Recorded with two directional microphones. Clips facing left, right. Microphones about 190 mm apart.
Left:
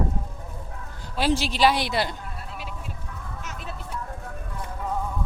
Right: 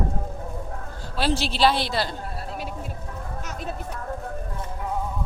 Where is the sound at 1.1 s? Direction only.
15° left (ahead or behind).